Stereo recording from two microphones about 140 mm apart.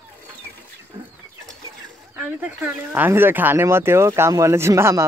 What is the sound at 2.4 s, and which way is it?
Speech, 15° right (ahead or behind).